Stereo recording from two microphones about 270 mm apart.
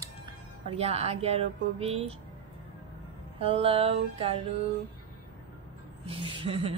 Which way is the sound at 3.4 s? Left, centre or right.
Centre.